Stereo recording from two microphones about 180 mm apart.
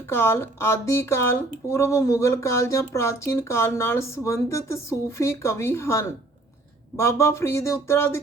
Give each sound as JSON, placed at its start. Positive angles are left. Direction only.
{"t": 0.1, "sound": "speech", "side_deg": 15}